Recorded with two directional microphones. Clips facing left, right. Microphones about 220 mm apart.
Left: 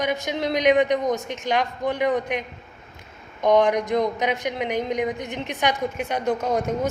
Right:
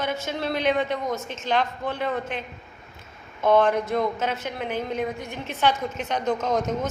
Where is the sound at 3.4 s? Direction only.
15° left (ahead or behind).